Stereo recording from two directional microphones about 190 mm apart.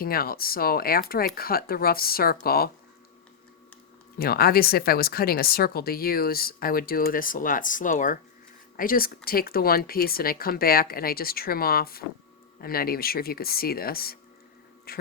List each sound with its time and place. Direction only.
0.0 s speech: 50° left (ahead or behind)
4.2 s speech: 55° left (ahead or behind)